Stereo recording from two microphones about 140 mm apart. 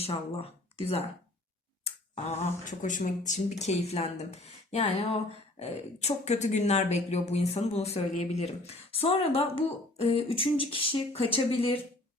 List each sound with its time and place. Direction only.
0.0 s speech: 45° left (ahead or behind)
1.8 s a sound: 55° left (ahead or behind)
2.4 s speech: 65° left (ahead or behind); by 11.8 s 40° left (ahead or behind)